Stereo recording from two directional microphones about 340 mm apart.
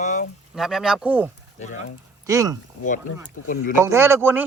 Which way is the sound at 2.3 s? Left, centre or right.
Centre.